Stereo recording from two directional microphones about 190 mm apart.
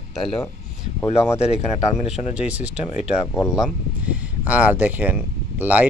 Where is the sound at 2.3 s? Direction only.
5° right (ahead or behind).